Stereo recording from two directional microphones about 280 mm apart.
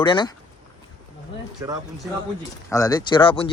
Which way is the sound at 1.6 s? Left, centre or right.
Centre.